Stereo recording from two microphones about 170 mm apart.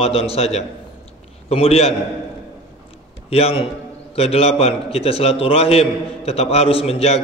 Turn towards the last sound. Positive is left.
turn(degrees=35)  # may be behind; listen again after turning